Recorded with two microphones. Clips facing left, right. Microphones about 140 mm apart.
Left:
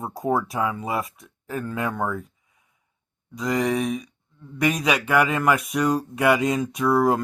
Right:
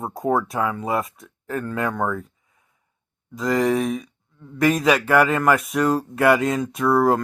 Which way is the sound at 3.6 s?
Centre (ahead or behind).